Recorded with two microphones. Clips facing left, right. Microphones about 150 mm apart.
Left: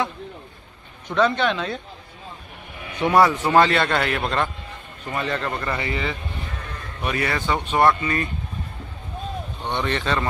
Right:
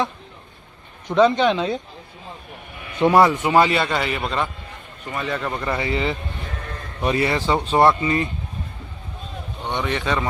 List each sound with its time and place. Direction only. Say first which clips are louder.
1.1 s speech: right 4 dB; 15° right (ahead or behind)
3.0 s speech: right 2 dB; 25° right (ahead or behind)
3.4 s a man's voice: even; 5° right (ahead or behind)
9.7 s speech: right 1 dB; 10° right (ahead or behind)